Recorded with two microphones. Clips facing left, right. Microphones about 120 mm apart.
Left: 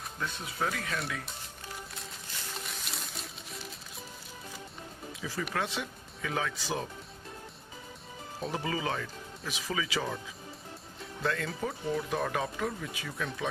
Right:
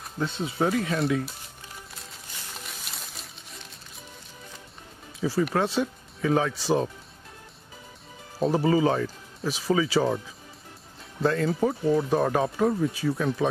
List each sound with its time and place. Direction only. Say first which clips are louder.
0.2 s speech: right 8 dB; 25° right (ahead or behind)
2.6 s music: even; centre (ahead or behind)
5.2 s speech: right 10 dB; 35° right (ahead or behind)
8.4 s speech: right 12 dB; 35° right (ahead or behind)
11.2 s speech: right 9 dB; 30° right (ahead or behind)